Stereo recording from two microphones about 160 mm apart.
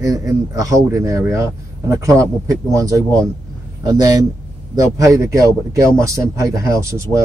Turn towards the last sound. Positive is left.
turn(degrees=-20)  # may be behind; listen again after turning